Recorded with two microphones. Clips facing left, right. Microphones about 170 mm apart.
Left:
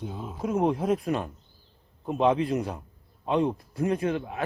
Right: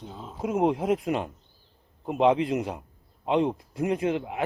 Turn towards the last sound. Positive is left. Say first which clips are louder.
# right 1 dB
turn(degrees=-20)  # may be behind; listen again after turning